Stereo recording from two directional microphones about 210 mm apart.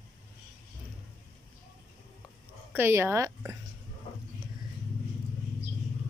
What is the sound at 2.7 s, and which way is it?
Speech, 10° right (ahead or behind).